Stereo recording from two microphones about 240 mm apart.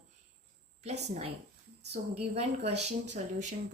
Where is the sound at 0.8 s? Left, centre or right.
Right.